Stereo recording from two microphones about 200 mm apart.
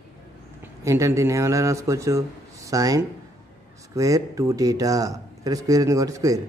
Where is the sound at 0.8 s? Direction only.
15° right (ahead or behind).